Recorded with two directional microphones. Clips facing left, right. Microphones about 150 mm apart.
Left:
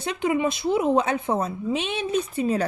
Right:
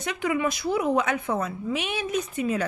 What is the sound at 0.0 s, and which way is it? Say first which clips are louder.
A woman's voice: left 3 dB; 25° left (ahead or behind).